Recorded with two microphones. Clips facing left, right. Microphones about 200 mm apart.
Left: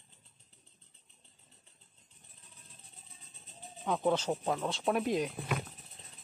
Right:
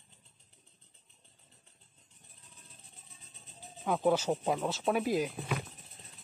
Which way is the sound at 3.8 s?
5° right (ahead or behind).